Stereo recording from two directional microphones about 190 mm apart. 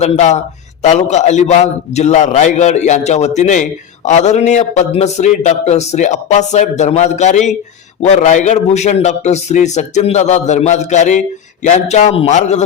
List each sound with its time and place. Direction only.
0.0 s a man's voice: 35° left (ahead or behind)